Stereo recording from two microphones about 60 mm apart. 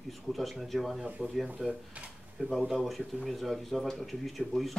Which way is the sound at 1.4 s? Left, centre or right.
Centre.